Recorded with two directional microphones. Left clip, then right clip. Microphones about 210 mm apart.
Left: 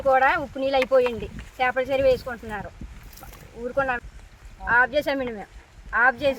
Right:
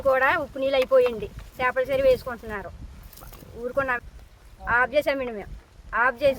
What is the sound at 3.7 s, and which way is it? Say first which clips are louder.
Speech: left 1 dB; 5° right (ahead or behind).